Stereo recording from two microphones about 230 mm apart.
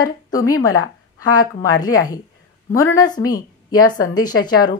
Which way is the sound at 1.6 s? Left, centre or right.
Centre.